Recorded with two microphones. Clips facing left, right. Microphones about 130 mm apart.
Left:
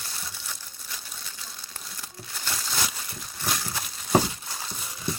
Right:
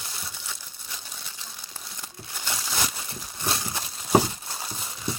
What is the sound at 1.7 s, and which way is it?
Crumpling, 15° right (ahead or behind).